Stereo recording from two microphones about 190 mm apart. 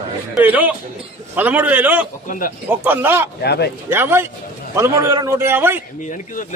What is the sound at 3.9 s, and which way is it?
A man's voice, 10° right (ahead or behind).